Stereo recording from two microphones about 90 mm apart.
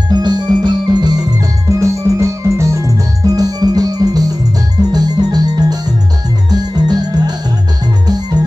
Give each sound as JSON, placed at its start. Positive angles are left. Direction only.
{"t": 0.1, "sound": "music", "side_deg": -55}
{"t": 1.8, "sound": "music", "side_deg": -35}